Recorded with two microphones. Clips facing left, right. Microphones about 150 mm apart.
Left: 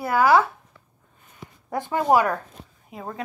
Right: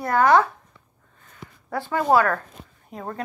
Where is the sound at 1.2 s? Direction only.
15° left (ahead or behind).